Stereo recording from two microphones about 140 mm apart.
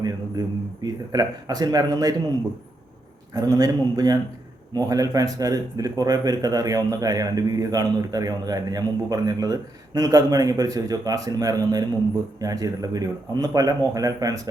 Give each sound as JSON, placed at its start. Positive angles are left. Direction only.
{"t": 0.0, "sound": "speech", "side_deg": -30}
{"t": 3.3, "sound": "speech", "side_deg": -25}